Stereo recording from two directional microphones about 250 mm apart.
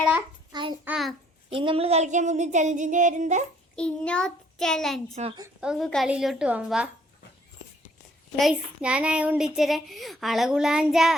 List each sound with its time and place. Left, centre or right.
0.5 s child singing: centre
0.9 s speech: centre
1.5 s a sound: right
3.8 s speech: centre
5.2 s a sound: right
5.5 s speech: centre
8.4 s speech: centre